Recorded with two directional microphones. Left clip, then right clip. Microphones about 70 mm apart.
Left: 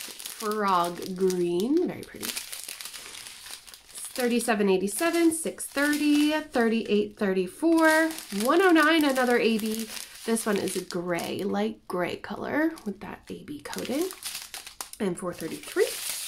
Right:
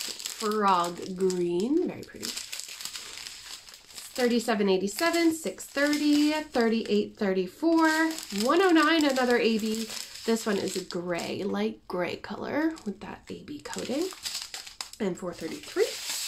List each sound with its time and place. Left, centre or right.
0.6 s speech: left
4.2 s speech: left
15.8 s speech: left